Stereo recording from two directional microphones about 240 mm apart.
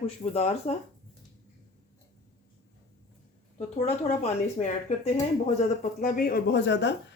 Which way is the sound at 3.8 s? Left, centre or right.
Left.